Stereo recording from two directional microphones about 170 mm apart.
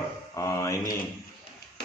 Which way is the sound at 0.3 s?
20° left (ahead or behind).